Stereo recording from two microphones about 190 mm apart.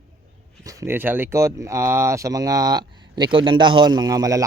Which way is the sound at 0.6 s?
15° right (ahead or behind).